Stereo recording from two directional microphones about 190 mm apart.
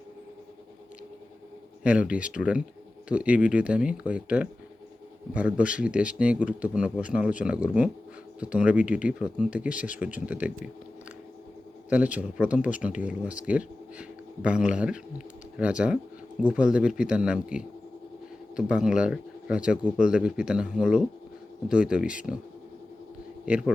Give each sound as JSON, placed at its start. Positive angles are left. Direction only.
{"t": 1.8, "sound": "speech", "side_deg": -5}
{"t": 11.9, "sound": "speech", "side_deg": -5}
{"t": 23.5, "sound": "speech", "side_deg": -5}